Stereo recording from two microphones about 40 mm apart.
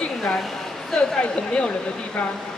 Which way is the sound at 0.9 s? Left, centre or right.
Left.